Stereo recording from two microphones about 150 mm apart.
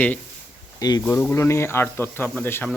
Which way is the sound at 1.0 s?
15° left (ahead or behind).